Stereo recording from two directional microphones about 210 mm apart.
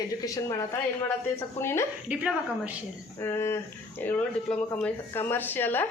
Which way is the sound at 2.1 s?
5° right (ahead or behind).